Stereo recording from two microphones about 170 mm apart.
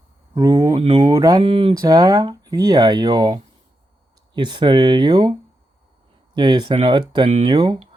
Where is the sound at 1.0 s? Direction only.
20° right (ahead or behind).